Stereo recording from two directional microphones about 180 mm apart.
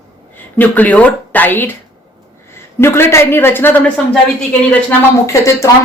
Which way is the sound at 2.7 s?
15° left (ahead or behind).